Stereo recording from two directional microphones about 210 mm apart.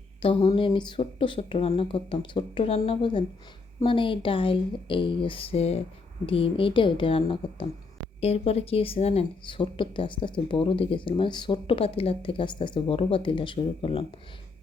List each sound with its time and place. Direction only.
0.2 s a woman's voice: 25° left (ahead or behind)